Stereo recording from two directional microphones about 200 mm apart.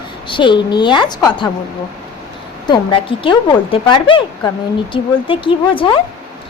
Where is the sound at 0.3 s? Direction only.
25° left (ahead or behind).